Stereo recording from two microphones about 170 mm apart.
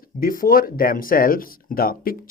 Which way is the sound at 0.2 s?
55° left (ahead or behind).